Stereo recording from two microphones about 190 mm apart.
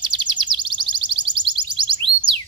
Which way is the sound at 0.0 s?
25° right (ahead or behind).